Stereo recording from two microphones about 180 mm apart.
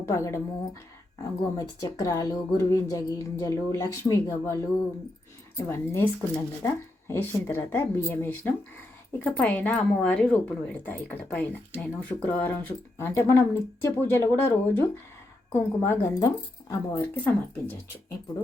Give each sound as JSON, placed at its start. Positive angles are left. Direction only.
{"t": 0.0, "sound": "speech", "side_deg": 15}